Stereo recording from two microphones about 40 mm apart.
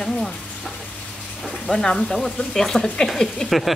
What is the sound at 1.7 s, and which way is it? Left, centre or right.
Speech, centre.